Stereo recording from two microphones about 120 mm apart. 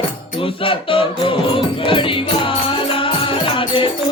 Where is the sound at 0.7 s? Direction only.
45° left (ahead or behind).